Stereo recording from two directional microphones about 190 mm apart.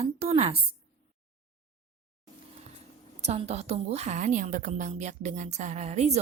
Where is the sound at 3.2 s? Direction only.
35° right (ahead or behind).